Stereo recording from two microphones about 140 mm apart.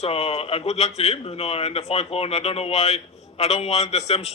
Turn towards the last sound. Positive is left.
turn(degrees=50)  # may be behind; listen again after turning